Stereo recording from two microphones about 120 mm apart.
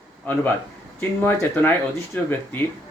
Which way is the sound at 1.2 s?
20° left (ahead or behind).